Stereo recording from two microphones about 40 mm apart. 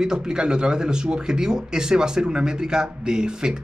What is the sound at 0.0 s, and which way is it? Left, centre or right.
Speech, centre.